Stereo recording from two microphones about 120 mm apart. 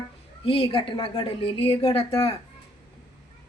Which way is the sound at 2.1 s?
30° left (ahead or behind).